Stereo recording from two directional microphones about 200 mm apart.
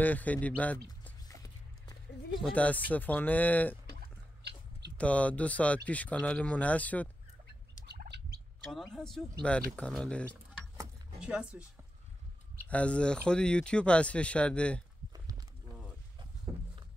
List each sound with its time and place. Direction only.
0.0 s speech: 10° left (ahead or behind)
1.0 s a sound: 15° left (ahead or behind)
2.4 s speech: 5° left (ahead or behind)
4.0 s chewing: 55° right (ahead or behind)
4.9 s speech: 5° left (ahead or behind)
7.8 s fowl: 55° right (ahead or behind)
8.7 s speech: centre (ahead or behind)
11.1 s speech: 5° right (ahead or behind)
12.6 s speech: 5° left (ahead or behind)
15.1 s livestock: 20° right (ahead or behind)